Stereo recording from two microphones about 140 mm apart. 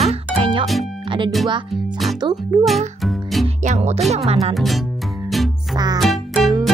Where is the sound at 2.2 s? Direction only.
35° right (ahead or behind).